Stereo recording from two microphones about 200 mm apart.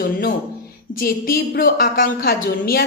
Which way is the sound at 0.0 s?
50° left (ahead or behind).